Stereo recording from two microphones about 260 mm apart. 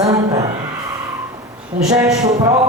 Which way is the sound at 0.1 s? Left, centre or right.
Centre.